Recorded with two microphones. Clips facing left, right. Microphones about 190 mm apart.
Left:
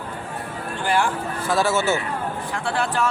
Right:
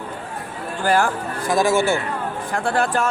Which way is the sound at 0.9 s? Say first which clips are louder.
Right 3 dB; 40° right (ahead or behind).